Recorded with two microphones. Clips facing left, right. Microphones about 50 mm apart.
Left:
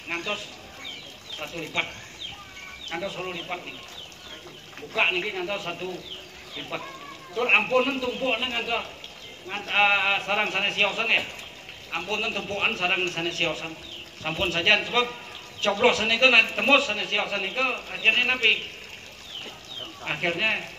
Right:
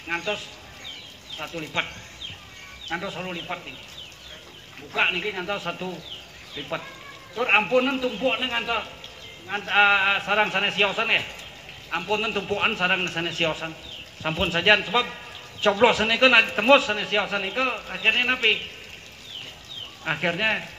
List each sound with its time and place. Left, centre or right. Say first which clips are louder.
0.1 s a man's voice: right 3 dB; centre
1.4 s a man's voice: right 1 dB; centre
2.9 s a man's voice: right 1 dB; centre
4.9 s a man's voice: right 1 dB; centre
7.3 s a man's voice: right 1 dB; centre
9.5 s a man's voice: right 3 dB; centre
20.1 s a man's voice: right 2 dB; centre